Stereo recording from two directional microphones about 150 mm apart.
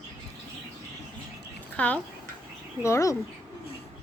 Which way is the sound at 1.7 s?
10° left (ahead or behind).